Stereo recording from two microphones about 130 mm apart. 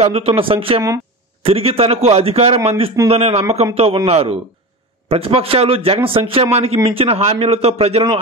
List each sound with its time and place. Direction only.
0.0 s a man's voice: 45° right (ahead or behind)